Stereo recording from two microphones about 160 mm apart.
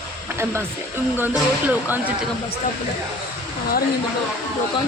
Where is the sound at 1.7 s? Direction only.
10° right (ahead or behind).